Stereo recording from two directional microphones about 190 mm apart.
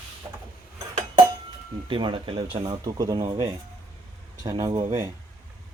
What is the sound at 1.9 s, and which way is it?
Speech, 25° right (ahead or behind).